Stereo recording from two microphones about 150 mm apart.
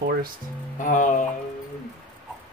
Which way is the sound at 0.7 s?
60° left (ahead or behind).